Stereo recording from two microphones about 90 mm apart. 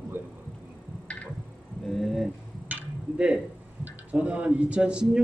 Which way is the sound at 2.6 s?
10° right (ahead or behind).